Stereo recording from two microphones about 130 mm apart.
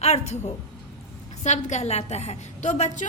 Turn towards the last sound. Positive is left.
turn(degrees=65)  # may be behind; listen again after turning